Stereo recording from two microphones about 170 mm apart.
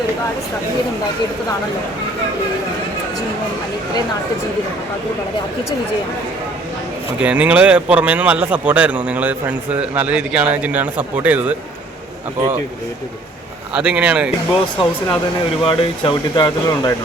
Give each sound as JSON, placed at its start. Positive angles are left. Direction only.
{"t": 7.2, "sound": "speech", "side_deg": -5}
{"t": 13.7, "sound": "speech", "side_deg": -5}
{"t": 14.8, "sound": "speech", "side_deg": 30}